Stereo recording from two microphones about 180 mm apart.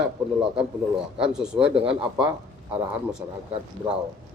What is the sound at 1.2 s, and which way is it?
A man's voice, 5° right (ahead or behind).